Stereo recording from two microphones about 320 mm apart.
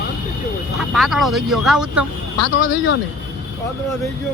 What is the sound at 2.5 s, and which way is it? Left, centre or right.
Speech, left.